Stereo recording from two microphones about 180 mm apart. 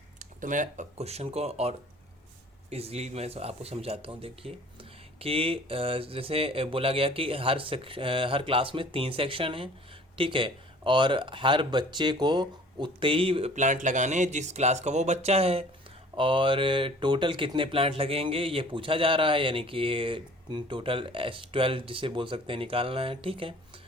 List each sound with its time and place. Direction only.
0.2 s speech: 45° right (ahead or behind); by 23.6 s 30° right (ahead or behind)